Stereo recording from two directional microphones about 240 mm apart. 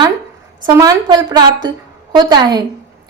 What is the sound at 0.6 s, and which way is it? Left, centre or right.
A woman's voice, centre.